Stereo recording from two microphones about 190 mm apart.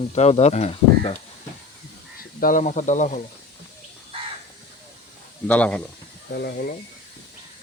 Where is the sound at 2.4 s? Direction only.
45° left (ahead or behind).